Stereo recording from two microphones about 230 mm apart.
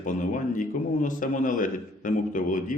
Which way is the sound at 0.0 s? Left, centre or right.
Left.